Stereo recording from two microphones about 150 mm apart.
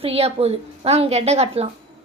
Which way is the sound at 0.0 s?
40° right (ahead or behind).